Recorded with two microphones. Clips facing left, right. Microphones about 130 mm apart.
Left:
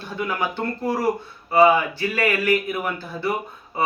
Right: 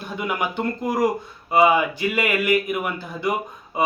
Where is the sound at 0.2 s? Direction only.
15° right (ahead or behind).